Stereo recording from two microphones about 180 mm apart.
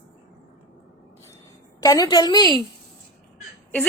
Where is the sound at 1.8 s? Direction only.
20° left (ahead or behind).